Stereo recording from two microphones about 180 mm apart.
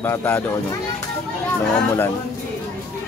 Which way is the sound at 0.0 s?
15° left (ahead or behind).